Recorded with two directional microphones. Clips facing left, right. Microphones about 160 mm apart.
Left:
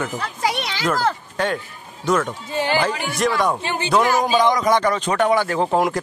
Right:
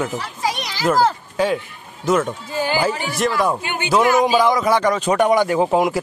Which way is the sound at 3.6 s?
30° left (ahead or behind).